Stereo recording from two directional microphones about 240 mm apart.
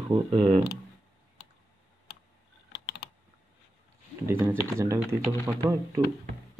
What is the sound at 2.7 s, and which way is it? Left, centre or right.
Typing, left.